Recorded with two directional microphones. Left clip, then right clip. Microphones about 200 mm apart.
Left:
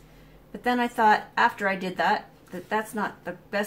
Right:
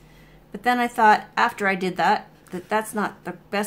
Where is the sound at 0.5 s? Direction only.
45° right (ahead or behind).